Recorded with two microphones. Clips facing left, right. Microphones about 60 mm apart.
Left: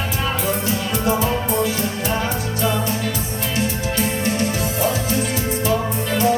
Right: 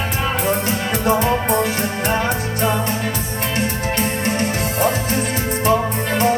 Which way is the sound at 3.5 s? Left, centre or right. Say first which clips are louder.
Right 1 dB; right.